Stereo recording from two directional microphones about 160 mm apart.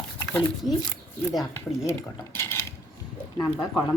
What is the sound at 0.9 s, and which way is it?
Speech, centre (ahead or behind).